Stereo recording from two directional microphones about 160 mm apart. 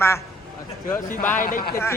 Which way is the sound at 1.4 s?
60° left (ahead or behind).